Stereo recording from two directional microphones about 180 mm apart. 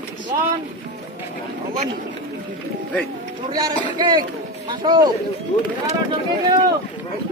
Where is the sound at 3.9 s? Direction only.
25° right (ahead or behind).